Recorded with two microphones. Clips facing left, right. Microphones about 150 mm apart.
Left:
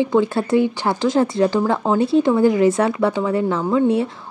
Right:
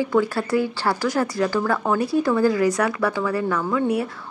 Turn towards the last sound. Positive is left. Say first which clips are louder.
# left 5 dB
turn(degrees=25)  # may be behind; listen again after turning